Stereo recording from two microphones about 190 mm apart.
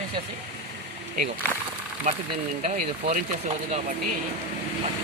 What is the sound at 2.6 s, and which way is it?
Speech, 45° right (ahead or behind).